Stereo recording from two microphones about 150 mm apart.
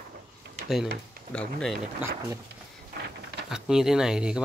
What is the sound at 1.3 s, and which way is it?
Speech, 5° left (ahead or behind).